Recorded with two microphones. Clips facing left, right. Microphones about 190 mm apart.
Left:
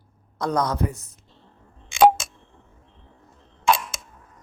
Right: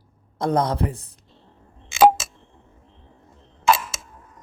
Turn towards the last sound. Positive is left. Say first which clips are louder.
# right 2 dB
turn(degrees=-5)  # may be behind; listen again after turning